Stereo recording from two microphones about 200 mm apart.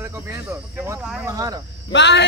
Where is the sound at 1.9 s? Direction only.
60° left (ahead or behind).